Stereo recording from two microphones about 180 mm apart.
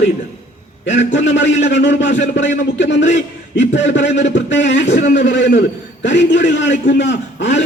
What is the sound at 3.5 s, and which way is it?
Speech, 90° left.